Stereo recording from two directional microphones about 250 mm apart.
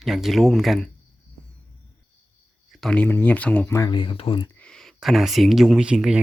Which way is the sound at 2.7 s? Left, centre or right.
Centre.